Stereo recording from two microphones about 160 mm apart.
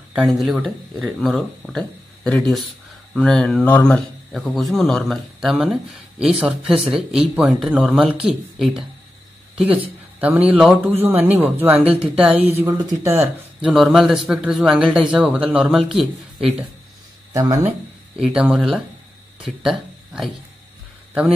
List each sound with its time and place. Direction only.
0.4 s speech: centre (ahead or behind); by 13.3 s 15° right (ahead or behind)
13.7 s speech: 5° right (ahead or behind)
17.3 s speech: 20° right (ahead or behind)
18.2 s speech: 5° right (ahead or behind)